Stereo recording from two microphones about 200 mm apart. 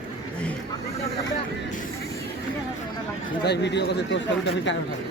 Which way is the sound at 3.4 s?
55° left (ahead or behind).